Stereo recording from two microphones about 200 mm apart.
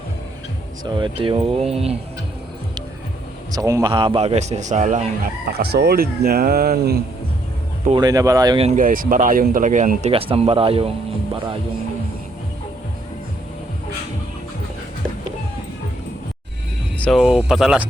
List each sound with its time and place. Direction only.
0.9 s speech: 25° right (ahead or behind)
3.5 s speech: 15° right (ahead or behind); by 5.1 s 35° right (ahead or behind)
5.5 s speech: 50° right (ahead or behind)
7.9 s speech: 20° right (ahead or behind)
8.6 s speech: 40° right (ahead or behind)
17.0 s speech: centre (ahead or behind)